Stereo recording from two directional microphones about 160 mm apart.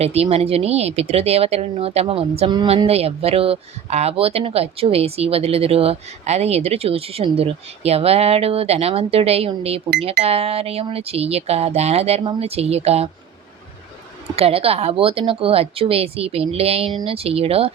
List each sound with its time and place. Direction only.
0.0 s speech: 40° right (ahead or behind)
14.3 s speech: 35° right (ahead or behind)